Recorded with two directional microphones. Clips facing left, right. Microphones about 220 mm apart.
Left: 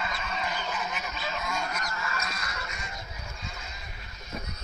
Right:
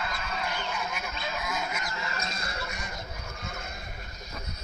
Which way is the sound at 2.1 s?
25° right (ahead or behind).